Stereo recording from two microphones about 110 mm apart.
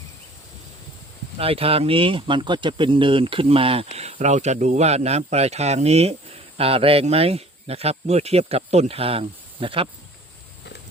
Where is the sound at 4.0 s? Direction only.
80° right; by 9.8 s 55° right (ahead or behind).